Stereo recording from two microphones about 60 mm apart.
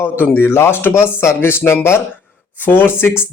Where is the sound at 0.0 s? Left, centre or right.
Left.